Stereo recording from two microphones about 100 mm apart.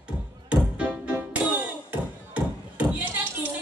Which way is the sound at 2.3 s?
15° right (ahead or behind).